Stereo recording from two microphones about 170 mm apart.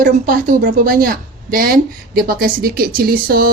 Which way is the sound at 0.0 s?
55° right (ahead or behind).